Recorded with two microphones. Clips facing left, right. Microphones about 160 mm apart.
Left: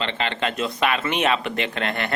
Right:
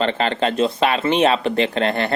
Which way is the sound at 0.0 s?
40° right (ahead or behind).